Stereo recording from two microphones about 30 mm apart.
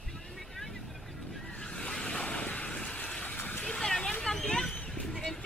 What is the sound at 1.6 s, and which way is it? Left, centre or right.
Waves, left.